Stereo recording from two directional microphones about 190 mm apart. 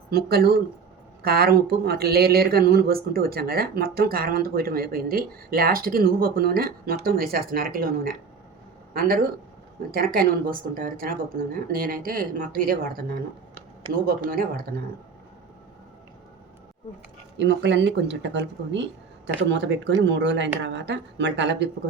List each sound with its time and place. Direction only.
0.1 s speech: 55° right (ahead or behind)
17.3 s speech: 70° right (ahead or behind)